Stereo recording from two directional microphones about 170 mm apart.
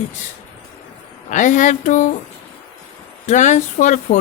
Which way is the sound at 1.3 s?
50° left (ahead or behind).